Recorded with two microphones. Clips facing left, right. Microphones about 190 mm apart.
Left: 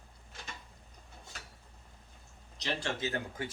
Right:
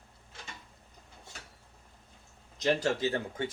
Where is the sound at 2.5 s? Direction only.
45° right (ahead or behind).